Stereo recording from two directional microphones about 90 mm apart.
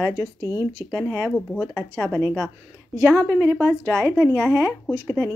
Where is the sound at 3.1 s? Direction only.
30° right (ahead or behind).